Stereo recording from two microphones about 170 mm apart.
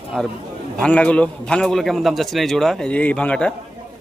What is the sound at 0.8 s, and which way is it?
A man's voice, 5° left (ahead or behind).